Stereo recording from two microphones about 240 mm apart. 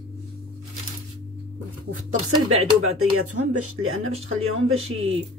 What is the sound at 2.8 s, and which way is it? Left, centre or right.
Speech, right.